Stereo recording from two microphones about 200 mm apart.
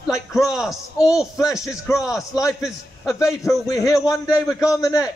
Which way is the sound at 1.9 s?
15° left (ahead or behind).